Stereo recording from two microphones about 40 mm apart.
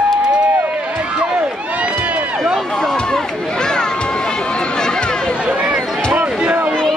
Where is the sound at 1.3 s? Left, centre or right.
Right.